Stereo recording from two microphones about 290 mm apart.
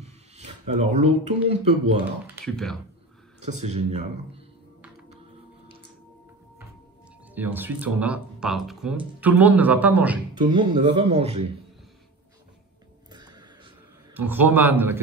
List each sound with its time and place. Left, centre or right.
0.0 s speech: right
2.2 s speech: centre
3.3 s speech: right
7.2 s speech: centre
10.3 s speech: centre
13.1 s a sound: centre